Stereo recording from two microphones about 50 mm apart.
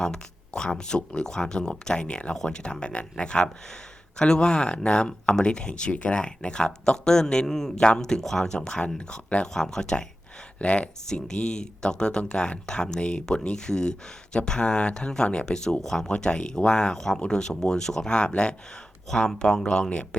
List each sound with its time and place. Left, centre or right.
0.0 s speech: centre
8.5 s speech: centre
19.0 s speech: centre